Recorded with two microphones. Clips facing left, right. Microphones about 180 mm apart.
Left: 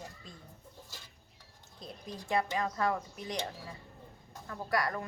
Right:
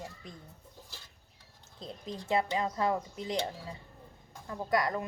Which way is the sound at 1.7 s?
20° right (ahead or behind).